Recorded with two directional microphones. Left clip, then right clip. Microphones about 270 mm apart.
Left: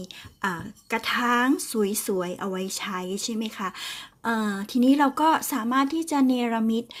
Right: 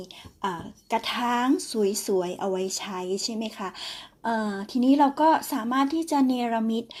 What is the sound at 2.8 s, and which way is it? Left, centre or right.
Speech, left.